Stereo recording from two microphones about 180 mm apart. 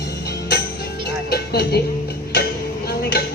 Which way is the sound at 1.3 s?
60° left (ahead or behind).